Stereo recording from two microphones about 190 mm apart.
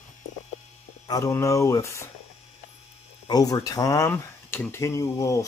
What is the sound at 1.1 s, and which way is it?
Speech, 15° left (ahead or behind).